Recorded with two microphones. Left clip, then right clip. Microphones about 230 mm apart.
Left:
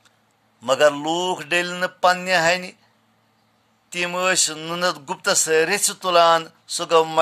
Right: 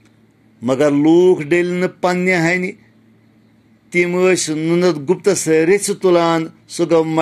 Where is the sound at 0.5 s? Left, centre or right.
Centre.